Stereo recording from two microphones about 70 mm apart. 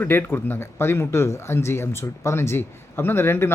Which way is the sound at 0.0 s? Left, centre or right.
Left.